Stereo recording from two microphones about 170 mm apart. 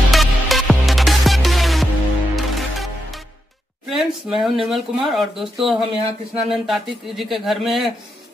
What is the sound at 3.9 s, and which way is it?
Speech, centre (ahead or behind).